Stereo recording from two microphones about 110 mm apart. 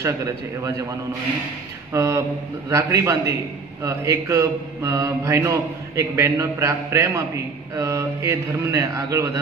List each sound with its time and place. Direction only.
0.0 s mantra: 25° right (ahead or behind)
1.9 s mantra: 25° right (ahead or behind)